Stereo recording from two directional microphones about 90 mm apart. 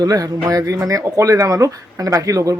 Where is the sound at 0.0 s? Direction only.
40° right (ahead or behind).